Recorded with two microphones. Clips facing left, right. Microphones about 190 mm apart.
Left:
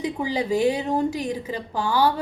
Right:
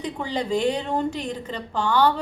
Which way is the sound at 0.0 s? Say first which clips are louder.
Left 2 dB; 10° left (ahead or behind).